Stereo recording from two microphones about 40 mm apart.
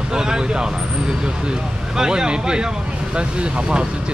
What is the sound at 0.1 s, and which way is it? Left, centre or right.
Speech, centre.